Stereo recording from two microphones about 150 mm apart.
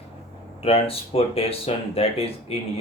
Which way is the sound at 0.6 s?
40° left (ahead or behind).